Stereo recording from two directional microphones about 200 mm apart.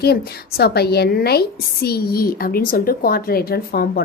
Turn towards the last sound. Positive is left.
turn(degrees=50)  # may be behind; listen again after turning